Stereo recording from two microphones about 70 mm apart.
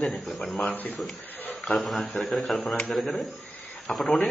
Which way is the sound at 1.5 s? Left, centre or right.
Centre.